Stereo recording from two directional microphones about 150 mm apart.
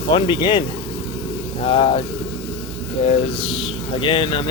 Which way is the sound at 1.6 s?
40° left (ahead or behind).